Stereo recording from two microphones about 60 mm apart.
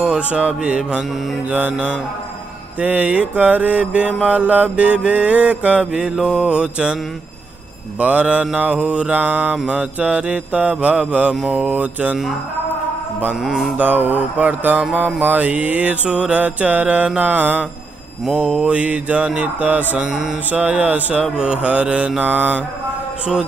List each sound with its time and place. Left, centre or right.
0.0 s mantra: right
5.9 s mantra: centre
6.4 s mantra: centre
8.0 s mantra: right
13.4 s mantra: centre
13.7 s mantra: right
20.0 s mantra: centre
20.4 s mantra: right
22.2 s mantra: right